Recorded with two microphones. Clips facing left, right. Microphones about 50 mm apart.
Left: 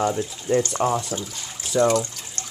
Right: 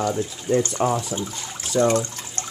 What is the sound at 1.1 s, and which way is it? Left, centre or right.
Speech, centre.